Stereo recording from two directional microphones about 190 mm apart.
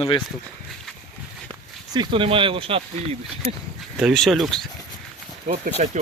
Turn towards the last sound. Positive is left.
turn(degrees=-40)  # may be behind; listen again after turning